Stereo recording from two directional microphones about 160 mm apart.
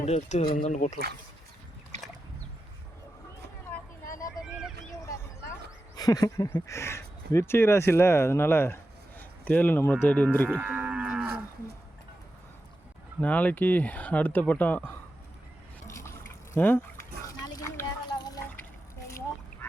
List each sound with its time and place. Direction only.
0.0 s speech: 45° left (ahead or behind)
3.7 s vehicle: 15° left (ahead or behind)
4.4 s vehicle: 5° right (ahead or behind)
4.9 s vehicle: 20° left (ahead or behind)
6.0 s speech: 25° left (ahead or behind)
10.5 s moo: 10° right (ahead or behind)
13.2 s speech: 10° left (ahead or behind)
16.6 s speech: 10° left (ahead or behind)
17.2 s a sound: 25° left (ahead or behind)